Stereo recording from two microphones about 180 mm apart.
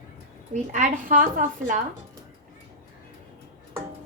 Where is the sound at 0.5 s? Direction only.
45° right (ahead or behind).